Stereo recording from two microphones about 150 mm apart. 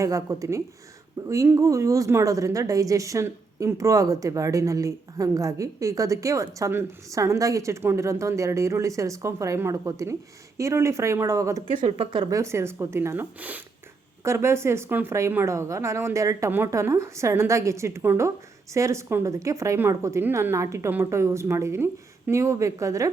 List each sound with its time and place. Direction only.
0.0 s speech: 20° right (ahead or behind)
11.9 s speech: 35° right (ahead or behind)
12.3 s speech: 20° right (ahead or behind)